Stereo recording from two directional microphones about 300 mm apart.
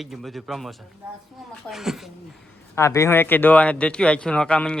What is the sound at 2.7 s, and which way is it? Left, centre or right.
A man's voice, centre.